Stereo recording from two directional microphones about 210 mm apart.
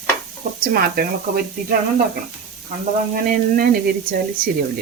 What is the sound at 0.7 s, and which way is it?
Speech, 45° right (ahead or behind).